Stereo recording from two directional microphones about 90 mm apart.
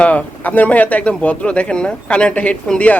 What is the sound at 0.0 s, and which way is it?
Speech, 15° left (ahead or behind).